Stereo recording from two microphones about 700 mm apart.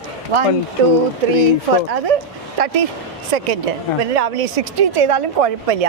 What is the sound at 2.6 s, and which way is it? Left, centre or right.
Speech, right.